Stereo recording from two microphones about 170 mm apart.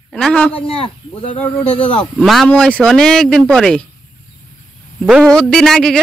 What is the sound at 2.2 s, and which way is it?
Speech, centre (ahead or behind).